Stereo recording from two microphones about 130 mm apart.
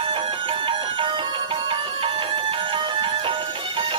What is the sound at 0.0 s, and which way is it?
Music, 45° right (ahead or behind).